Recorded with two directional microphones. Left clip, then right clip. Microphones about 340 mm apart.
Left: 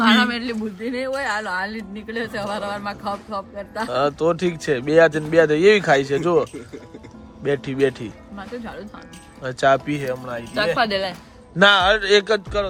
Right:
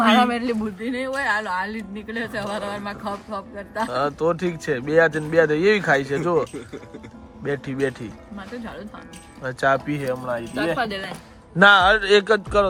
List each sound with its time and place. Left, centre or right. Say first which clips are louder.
0.0 s a sound: even; centre
0.8 s speech: left 1 dB; centre
10.8 s speech: left 5 dB; centre
11.5 s speech: right 1 dB; centre